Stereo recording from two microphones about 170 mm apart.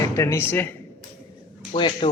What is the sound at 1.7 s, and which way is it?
Speech, 35° left (ahead or behind).